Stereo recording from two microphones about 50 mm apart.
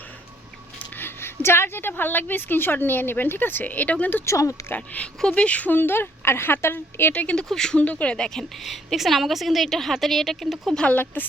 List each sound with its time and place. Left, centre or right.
0.9 s a woman's voice: left
4.3 s speech: left
5.0 s speech: left
5.7 s a woman's voice: left
7.1 s speech: left
7.5 s a woman's voice: centre
7.8 s speech: left
8.1 s a woman's voice: centre
8.6 s a woman's voice: centre
11.0 s a woman's voice: left